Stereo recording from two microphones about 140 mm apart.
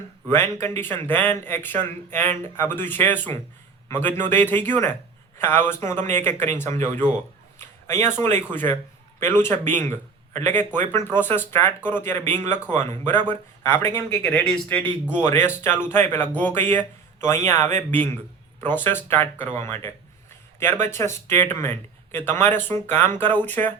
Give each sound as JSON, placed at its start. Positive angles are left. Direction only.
{"t": 0.3, "sound": "speech", "side_deg": 20}
{"t": 6.2, "sound": "speech", "side_deg": -60}
{"t": 6.5, "sound": "speech", "side_deg": 20}
{"t": 7.6, "sound": "a sound", "side_deg": 15}
{"t": 8.5, "sound": "speech", "side_deg": 15}